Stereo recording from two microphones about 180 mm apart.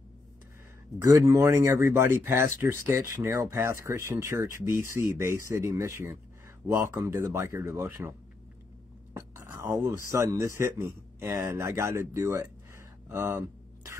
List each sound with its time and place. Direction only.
1.1 s speech: 20° right (ahead or behind)
9.1 s speech: 15° right (ahead or behind)